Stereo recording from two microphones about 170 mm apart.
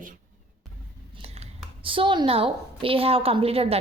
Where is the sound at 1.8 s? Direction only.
30° right (ahead or behind).